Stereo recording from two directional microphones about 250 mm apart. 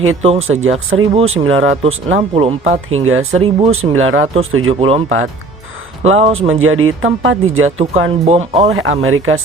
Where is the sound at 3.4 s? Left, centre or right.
Right.